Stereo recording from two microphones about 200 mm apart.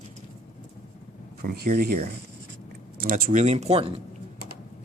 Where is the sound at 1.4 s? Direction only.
50° right (ahead or behind); by 4.0 s 30° right (ahead or behind).